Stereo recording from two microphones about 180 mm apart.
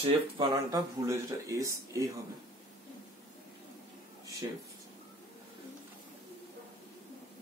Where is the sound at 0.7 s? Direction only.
15° right (ahead or behind).